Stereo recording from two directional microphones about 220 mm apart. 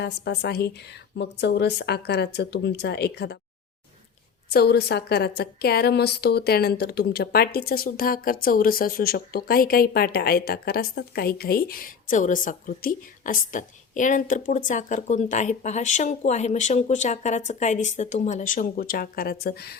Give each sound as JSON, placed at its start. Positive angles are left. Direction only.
{"t": 0.0, "sound": "speech", "side_deg": 50}
{"t": 4.4, "sound": "a woman's voice", "side_deg": 45}